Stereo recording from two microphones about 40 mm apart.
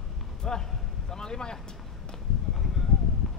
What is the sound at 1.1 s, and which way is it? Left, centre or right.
Boat, centre.